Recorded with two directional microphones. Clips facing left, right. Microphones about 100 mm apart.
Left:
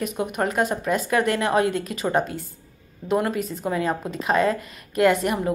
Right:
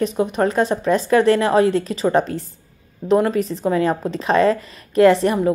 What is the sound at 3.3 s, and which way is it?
A woman's voice, 30° right (ahead or behind).